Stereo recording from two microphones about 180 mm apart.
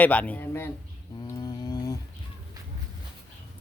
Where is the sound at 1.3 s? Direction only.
20° left (ahead or behind).